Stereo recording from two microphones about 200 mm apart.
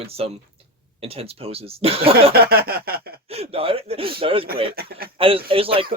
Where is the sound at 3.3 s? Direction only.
30° right (ahead or behind).